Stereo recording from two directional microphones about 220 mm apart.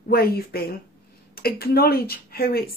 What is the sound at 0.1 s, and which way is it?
Speech, 45° left (ahead or behind).